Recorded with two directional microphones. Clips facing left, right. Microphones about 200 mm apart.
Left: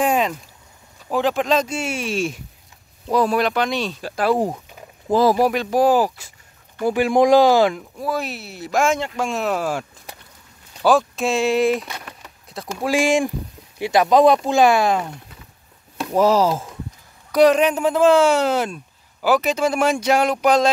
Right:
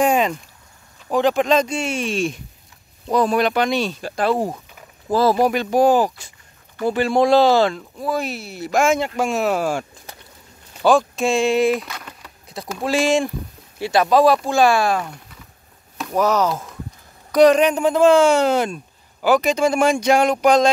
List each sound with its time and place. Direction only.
0.0 s a sound: centre (ahead or behind)
1.0 s speech: centre (ahead or behind)
5.5 s speech: centre (ahead or behind)
8.1 s speech: centre (ahead or behind)
12.1 s a sound: centre (ahead or behind)
12.8 s speech: 10° left (ahead or behind)
16.1 s speech: 30° left (ahead or behind)
17.3 s speech: 5° left (ahead or behind)